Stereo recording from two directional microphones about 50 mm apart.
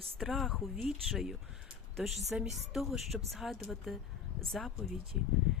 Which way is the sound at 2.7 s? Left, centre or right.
Centre.